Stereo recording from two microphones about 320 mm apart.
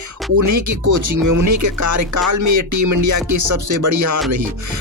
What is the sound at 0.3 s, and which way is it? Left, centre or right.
Speech, right.